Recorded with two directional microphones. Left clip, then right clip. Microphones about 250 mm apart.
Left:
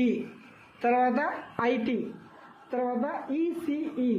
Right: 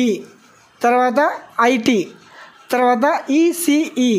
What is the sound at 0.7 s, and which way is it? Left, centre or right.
Speech, right.